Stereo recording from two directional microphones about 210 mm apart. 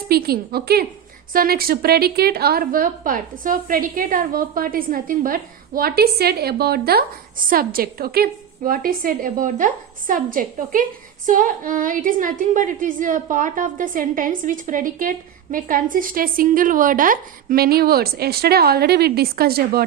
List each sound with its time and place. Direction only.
0.1 s a woman's voice: 45° right (ahead or behind)